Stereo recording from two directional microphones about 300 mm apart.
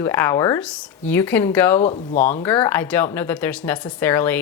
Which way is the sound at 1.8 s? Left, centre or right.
Left.